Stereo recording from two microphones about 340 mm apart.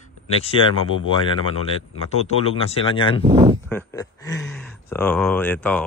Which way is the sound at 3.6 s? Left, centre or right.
Centre.